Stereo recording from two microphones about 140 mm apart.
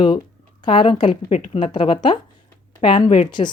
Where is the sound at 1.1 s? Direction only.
45° left (ahead or behind).